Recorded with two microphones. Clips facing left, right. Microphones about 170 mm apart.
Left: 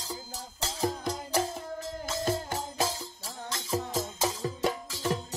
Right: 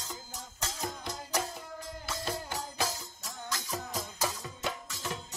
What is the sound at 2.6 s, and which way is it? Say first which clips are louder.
Music: left 4 dB; 25° left (ahead or behind).